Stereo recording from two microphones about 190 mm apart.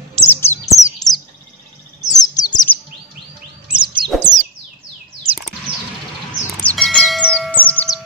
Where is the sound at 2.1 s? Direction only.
20° left (ahead or behind).